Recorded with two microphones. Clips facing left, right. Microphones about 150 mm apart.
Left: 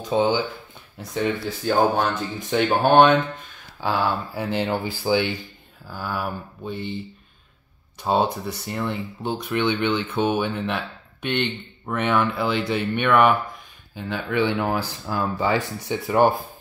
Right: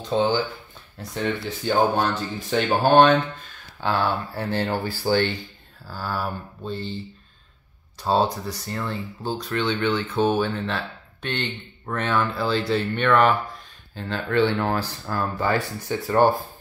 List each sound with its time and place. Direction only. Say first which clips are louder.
0.1 s speech: left 1 dB; 10° left (ahead or behind)
2.5 s speech: left 1 dB; 15° left (ahead or behind)
8.1 s speech: even; 20° left (ahead or behind)